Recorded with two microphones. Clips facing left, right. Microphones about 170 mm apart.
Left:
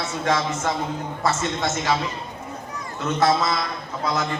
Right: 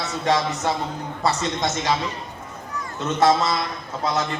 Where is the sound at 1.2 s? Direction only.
15° right (ahead or behind).